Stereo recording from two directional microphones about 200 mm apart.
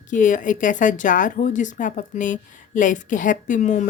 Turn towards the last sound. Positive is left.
turn(degrees=40)  # may be behind; listen again after turning